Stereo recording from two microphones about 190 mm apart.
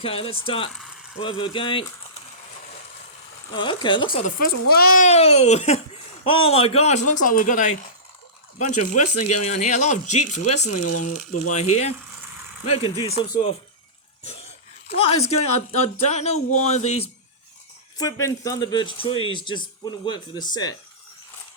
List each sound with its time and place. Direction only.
0.0 s speech: 30° left (ahead or behind)
0.7 s speech: centre (ahead or behind)
1.2 s speech: 25° left (ahead or behind)
3.5 s speech: 25° left (ahead or behind)
4.4 s a child's voice: 55° left (ahead or behind)
5.0 s speech: 35° left (ahead or behind)
14.9 s speech: 30° left (ahead or behind)
17.9 s speech: 20° left (ahead or behind)